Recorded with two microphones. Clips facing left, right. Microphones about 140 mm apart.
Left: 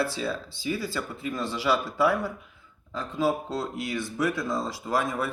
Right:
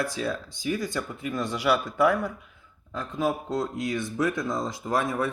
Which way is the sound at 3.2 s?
20° right (ahead or behind).